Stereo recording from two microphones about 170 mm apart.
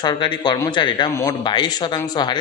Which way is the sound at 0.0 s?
25° left (ahead or behind).